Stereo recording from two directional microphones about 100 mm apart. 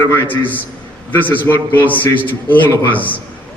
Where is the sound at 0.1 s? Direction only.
15° left (ahead or behind).